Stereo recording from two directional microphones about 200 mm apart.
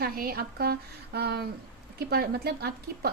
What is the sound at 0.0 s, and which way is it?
A woman's voice, 50° right (ahead or behind).